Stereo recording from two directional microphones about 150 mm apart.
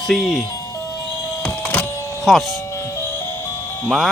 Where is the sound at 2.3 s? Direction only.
Centre (ahead or behind).